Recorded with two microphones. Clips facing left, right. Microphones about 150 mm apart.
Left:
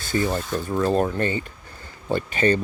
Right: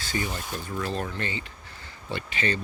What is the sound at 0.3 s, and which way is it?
Speech, 40° left (ahead or behind).